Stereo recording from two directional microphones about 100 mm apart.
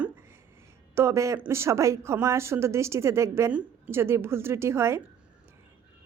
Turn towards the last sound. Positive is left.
turn(degrees=-25)  # may be behind; listen again after turning